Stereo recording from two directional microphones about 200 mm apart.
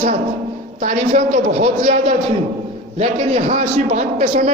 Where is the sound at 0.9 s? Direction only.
35° right (ahead or behind).